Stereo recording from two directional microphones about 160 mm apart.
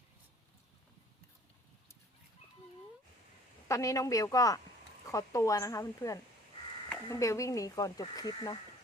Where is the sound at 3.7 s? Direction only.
20° left (ahead or behind).